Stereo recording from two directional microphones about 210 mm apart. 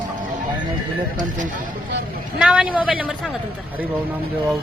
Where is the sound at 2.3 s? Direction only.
5° right (ahead or behind).